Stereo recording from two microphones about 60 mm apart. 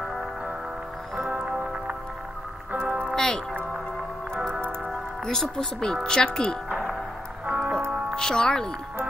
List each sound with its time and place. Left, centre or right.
1.4 s music: centre
3.2 s music: centre
5.2 s speech: centre
7.4 s music: right
8.2 s speech: centre